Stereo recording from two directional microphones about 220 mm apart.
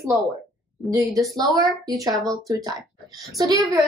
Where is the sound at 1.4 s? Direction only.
15° right (ahead or behind).